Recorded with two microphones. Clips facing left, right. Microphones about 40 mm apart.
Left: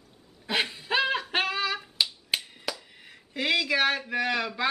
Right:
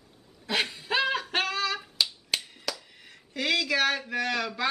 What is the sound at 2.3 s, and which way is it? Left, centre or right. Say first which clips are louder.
Speech: left 1 dB; centre.